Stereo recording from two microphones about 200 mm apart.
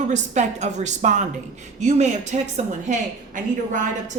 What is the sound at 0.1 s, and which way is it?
A woman's voice, 35° right (ahead or behind).